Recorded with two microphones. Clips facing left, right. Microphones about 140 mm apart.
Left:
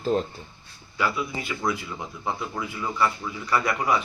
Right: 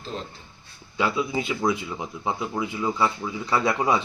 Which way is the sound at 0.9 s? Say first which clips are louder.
Right 3 dB; 20° right (ahead or behind).